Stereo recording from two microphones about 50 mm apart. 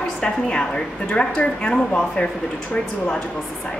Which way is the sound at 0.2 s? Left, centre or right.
Centre.